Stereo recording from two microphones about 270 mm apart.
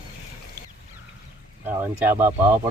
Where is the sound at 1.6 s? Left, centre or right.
Centre.